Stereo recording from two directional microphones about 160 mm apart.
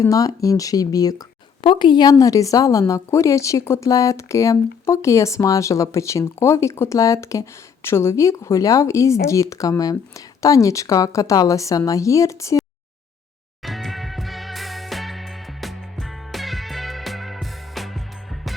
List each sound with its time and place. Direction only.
0.0 s speech: 20° left (ahead or behind)
13.6 s music: centre (ahead or behind)